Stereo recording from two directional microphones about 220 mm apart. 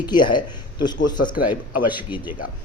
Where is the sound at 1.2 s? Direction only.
40° left (ahead or behind).